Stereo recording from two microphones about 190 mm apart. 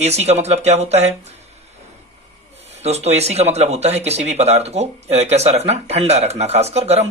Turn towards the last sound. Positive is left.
turn(degrees=-35)  # may be behind; listen again after turning